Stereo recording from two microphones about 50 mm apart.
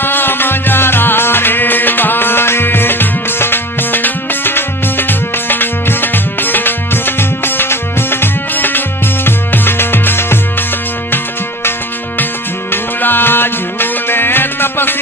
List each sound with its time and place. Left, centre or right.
0.0 s music: left
12.7 s music: left